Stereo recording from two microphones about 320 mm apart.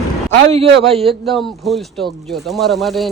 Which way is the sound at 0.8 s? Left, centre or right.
Centre.